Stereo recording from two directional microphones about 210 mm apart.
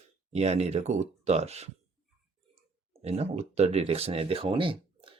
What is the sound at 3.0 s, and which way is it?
Speech, 30° right (ahead or behind).